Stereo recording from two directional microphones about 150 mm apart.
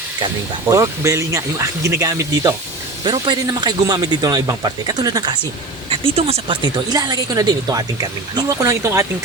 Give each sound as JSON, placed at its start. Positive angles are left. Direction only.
{"t": 0.7, "sound": "speech", "side_deg": -20}
{"t": 5.9, "sound": "speech", "side_deg": -40}